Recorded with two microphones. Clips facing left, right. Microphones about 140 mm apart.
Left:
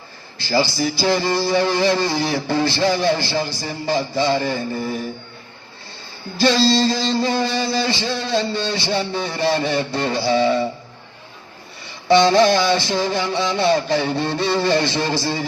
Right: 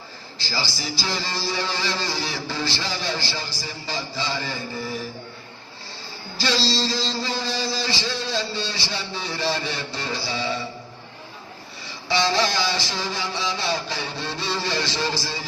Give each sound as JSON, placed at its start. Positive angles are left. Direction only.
{"t": 0.3, "sound": "music", "side_deg": 55}
{"t": 6.4, "sound": "music", "side_deg": 55}
{"t": 11.9, "sound": "music", "side_deg": 55}